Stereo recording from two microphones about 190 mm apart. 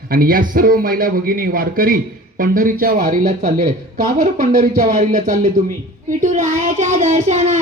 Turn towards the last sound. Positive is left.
turn(degrees=-40)  # may be behind; listen again after turning